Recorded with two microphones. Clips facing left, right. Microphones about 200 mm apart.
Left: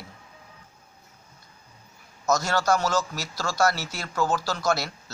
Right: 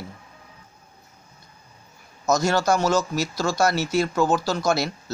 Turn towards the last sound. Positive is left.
turn(degrees=-20)  # may be behind; listen again after turning